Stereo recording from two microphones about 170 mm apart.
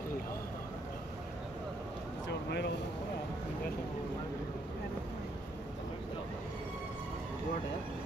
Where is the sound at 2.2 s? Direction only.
85° left.